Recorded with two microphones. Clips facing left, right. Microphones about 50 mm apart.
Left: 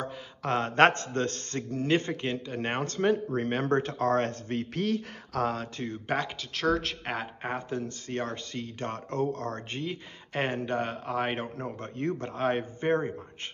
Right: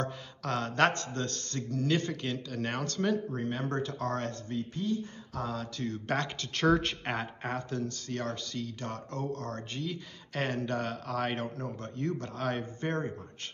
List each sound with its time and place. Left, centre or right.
0.4 s speech: left
3.3 s speech: left
4.5 s speech: left
5.4 s speech: left
6.0 s speech: centre
7.4 s speech: centre